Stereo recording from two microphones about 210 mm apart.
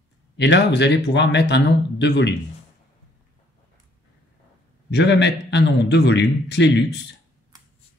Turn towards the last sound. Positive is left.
turn(degrees=55)  # may be behind; listen again after turning